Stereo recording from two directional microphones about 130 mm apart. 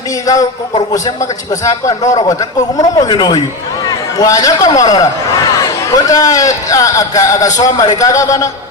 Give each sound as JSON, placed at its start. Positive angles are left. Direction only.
{"t": 0.9, "sound": "a man's voice", "side_deg": 25}